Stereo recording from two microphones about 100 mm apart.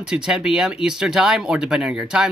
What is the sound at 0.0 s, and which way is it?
Speech, 5° right (ahead or behind).